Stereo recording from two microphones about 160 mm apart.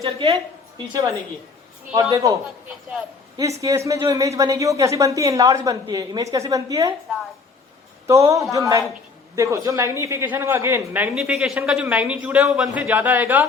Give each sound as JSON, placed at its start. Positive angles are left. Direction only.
{"t": 0.0, "sound": "a woman's voice", "side_deg": -40}
{"t": 1.9, "sound": "speech", "side_deg": -25}
{"t": 3.6, "sound": "speech", "side_deg": -20}
{"t": 8.0, "sound": "a man's voice", "side_deg": -20}